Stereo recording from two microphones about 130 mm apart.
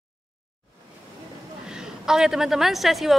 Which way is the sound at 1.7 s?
5° right (ahead or behind).